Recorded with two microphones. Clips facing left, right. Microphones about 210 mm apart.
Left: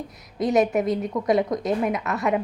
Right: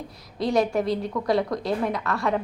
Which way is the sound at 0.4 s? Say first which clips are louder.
Left 2 dB; 20° left (ahead or behind).